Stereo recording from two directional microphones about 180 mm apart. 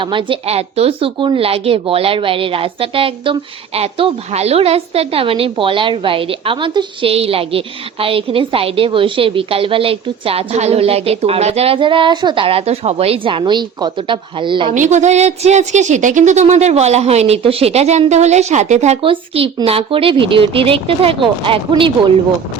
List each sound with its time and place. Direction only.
0.0 s a woman's voice: 25° right (ahead or behind)
14.7 s a woman's voice: 40° right (ahead or behind)